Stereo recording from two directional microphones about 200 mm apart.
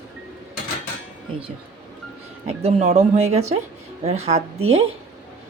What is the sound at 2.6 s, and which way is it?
Speech, 30° right (ahead or behind).